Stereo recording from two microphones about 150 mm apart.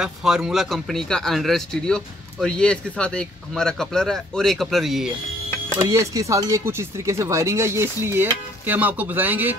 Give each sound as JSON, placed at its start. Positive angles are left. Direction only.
{"t": 0.0, "sound": "speech", "side_deg": -5}
{"t": 5.8, "sound": "speech", "side_deg": -20}